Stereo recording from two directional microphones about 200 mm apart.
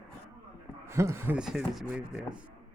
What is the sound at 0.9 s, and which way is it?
Speech, 15° right (ahead or behind).